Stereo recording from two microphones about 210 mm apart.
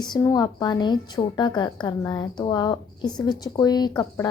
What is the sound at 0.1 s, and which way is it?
A woman's voice, 15° left (ahead or behind).